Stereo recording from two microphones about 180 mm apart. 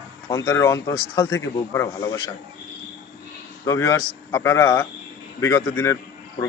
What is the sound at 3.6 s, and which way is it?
Speech, 15° left (ahead or behind).